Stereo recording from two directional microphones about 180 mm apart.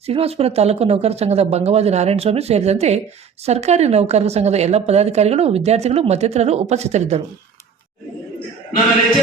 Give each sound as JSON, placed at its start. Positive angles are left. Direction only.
{"t": 0.0, "sound": "a woman's voice", "side_deg": -35}